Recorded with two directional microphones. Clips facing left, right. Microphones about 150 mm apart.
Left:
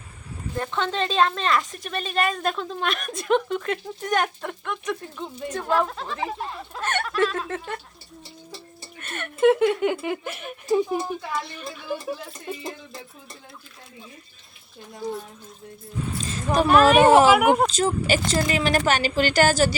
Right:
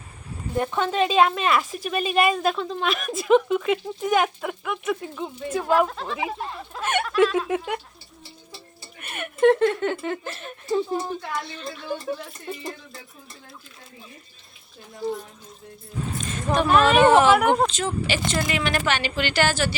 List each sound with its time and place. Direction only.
0.5 s a woman's voice: 15° right (ahead or behind)
9.0 s a sound: 10° right (ahead or behind)
9.4 s speech: 10° left (ahead or behind)
16.1 s a woman's voice: 35° left (ahead or behind)
16.6 s a woman's voice: 5° left (ahead or behind)
17.7 s a woman's voice: 40° left (ahead or behind)